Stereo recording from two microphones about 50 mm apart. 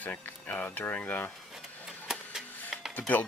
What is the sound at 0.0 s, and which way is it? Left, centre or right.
Speech, left.